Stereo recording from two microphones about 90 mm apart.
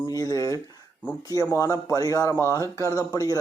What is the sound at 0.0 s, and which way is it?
Speech, 40° left (ahead or behind).